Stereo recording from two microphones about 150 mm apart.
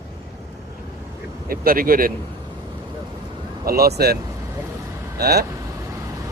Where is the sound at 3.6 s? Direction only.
90° right.